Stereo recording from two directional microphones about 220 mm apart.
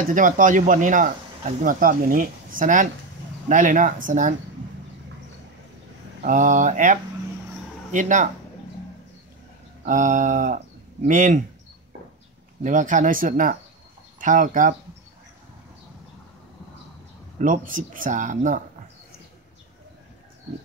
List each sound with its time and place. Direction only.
0.1 s speech: 35° right (ahead or behind)
6.2 s speech: 35° right (ahead or behind)
9.8 s speech: 35° right (ahead or behind)
12.6 s speech: 35° right (ahead or behind)
17.4 s speech: 35° right (ahead or behind)